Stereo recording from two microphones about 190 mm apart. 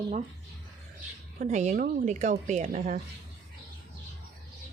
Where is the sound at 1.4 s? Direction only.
40° right (ahead or behind).